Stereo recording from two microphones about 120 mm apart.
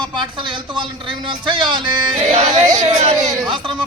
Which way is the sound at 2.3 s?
65° right (ahead or behind).